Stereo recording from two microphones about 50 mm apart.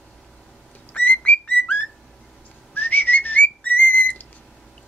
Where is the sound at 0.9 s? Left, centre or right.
Left.